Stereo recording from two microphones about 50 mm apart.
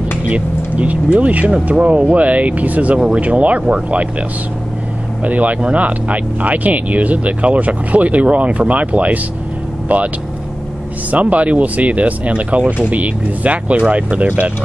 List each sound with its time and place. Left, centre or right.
0.3 s speech: right
5.2 s speech: right
11.1 s speech: right